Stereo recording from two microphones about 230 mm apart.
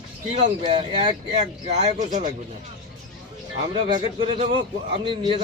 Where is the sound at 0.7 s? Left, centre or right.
Right.